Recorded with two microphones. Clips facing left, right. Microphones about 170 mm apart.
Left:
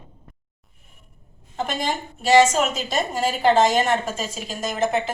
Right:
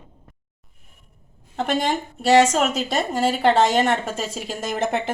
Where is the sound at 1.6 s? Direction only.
65° right (ahead or behind).